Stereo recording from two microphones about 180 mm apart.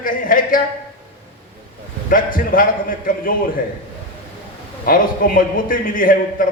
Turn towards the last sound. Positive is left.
turn(degrees=50)  # may be behind; listen again after turning